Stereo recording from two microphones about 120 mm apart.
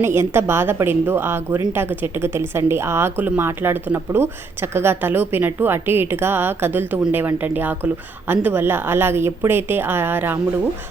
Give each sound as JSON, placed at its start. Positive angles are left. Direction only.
{"t": 0.0, "sound": "a woman's voice", "side_deg": -20}